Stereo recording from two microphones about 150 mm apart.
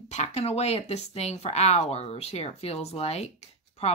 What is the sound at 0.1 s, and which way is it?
Speech, 50° left (ahead or behind).